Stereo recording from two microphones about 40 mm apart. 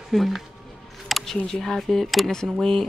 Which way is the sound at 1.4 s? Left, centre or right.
Centre.